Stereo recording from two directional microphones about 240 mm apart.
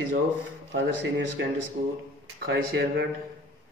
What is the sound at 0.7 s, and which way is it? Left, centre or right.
Speech, right.